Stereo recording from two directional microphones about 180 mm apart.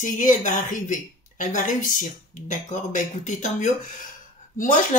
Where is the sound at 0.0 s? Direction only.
45° left (ahead or behind).